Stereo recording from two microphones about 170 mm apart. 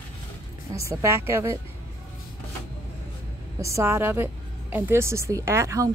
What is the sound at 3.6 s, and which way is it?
Speech, 15° right (ahead or behind).